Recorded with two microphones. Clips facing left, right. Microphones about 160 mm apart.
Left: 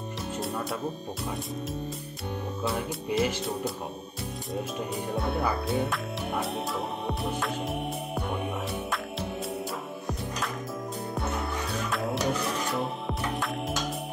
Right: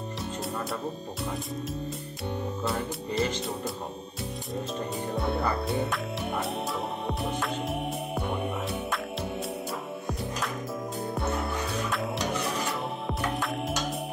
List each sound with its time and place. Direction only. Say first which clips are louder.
3.1 s music: left 2 dB; 5° left (ahead or behind)
5.1 s music: even; centre (ahead or behind)
11.9 s music: left 2 dB; centre (ahead or behind)